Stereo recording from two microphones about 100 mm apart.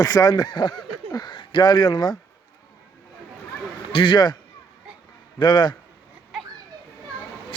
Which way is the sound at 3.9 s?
55° left (ahead or behind).